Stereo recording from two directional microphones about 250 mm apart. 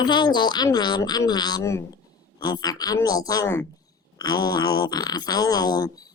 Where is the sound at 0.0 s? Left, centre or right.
Centre.